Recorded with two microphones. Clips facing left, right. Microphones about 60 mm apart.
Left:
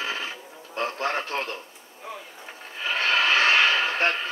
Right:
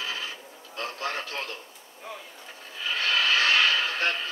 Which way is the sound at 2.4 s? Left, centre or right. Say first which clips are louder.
Left 3 dB; left.